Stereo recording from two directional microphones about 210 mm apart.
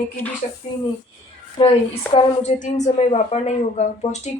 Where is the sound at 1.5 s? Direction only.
25° left (ahead or behind).